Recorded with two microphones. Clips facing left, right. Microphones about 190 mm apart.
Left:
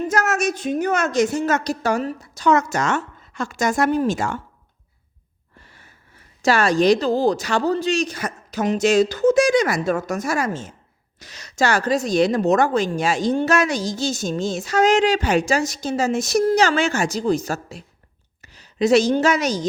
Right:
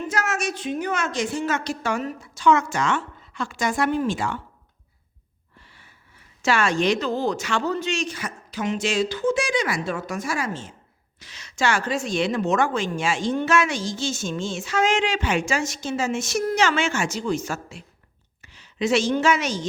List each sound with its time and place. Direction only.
0.0 s a woman's voice: 40° left (ahead or behind)
5.5 s a woman's voice: 45° left (ahead or behind)